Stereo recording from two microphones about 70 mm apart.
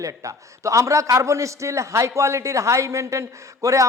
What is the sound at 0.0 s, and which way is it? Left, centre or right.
A man's voice, right.